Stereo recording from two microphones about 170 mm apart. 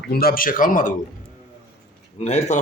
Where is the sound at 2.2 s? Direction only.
40° left (ahead or behind).